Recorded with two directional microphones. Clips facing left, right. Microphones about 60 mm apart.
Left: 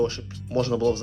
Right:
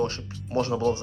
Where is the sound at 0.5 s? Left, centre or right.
Right.